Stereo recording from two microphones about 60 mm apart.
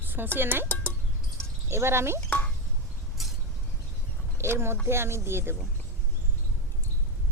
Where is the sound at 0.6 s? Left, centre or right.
Left.